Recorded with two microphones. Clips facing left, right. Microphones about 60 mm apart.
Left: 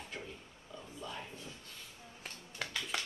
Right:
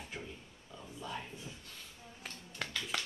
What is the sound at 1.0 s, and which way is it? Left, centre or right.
Speech, centre.